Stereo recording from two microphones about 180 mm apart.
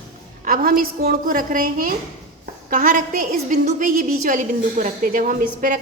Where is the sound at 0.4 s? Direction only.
50° right (ahead or behind).